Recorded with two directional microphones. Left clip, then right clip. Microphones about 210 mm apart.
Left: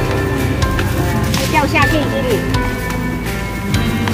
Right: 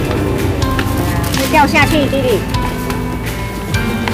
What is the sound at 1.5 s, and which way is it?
Speech, 35° right (ahead or behind).